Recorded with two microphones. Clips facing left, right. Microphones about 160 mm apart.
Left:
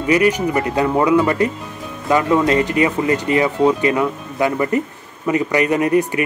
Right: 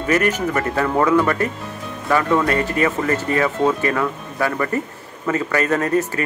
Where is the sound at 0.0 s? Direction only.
15° left (ahead or behind).